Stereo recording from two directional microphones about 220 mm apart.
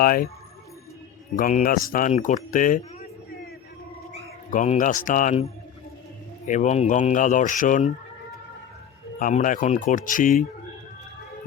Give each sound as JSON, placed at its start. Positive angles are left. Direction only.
{"t": 0.0, "sound": "speech", "side_deg": 40}
{"t": 1.4, "sound": "speech", "side_deg": 40}
{"t": 4.5, "sound": "speech", "side_deg": 35}
{"t": 6.5, "sound": "speech", "side_deg": 30}
{"t": 9.1, "sound": "speech", "side_deg": 35}